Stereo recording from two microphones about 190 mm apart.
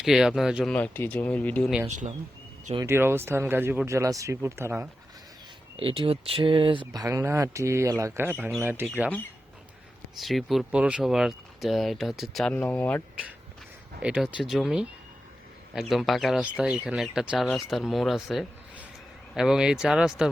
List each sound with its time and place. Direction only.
0.0 s speech: centre (ahead or behind)
1.9 s speech: 40° right (ahead or behind)
2.7 s speech: 15° right (ahead or behind)
5.7 s speech: 30° right (ahead or behind); by 8.9 s 10° right (ahead or behind)
10.2 s speech: centre (ahead or behind)
14.0 s speech: 5° right (ahead or behind)